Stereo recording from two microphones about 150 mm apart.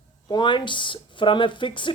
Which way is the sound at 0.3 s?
30° left (ahead or behind).